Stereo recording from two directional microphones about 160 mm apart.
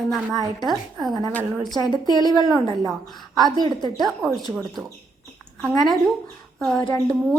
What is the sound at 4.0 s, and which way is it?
Speech, centre (ahead or behind).